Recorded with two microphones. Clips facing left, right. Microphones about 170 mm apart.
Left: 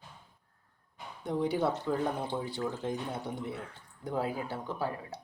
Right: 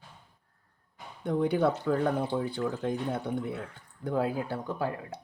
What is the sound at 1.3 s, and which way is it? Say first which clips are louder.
Speech: right 4 dB; 60° right (ahead or behind).